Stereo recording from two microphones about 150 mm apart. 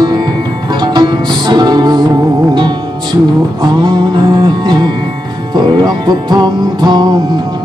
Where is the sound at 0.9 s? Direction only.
30° right (ahead or behind).